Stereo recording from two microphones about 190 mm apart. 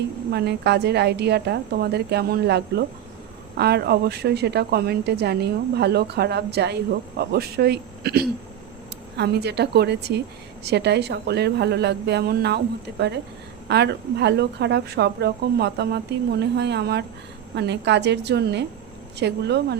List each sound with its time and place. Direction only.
0.3 s a woman's voice: 60° right (ahead or behind)